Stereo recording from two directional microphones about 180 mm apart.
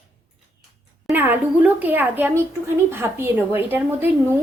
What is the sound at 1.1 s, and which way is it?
Speech, 10° right (ahead or behind).